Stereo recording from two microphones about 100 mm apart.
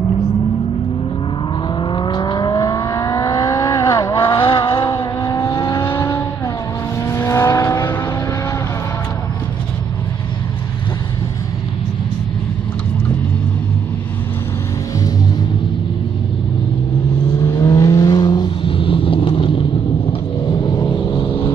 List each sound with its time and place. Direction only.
1.8 s vehicle: 55° left (ahead or behind); by 4.2 s 30° left (ahead or behind)
4.3 s vehicle: 60° left (ahead or behind)
4.8 s vehicle: 30° left (ahead or behind)
17.4 s vehicle: 30° left (ahead or behind); by 19.6 s 60° left (ahead or behind)
20.4 s vehicle: 45° left (ahead or behind)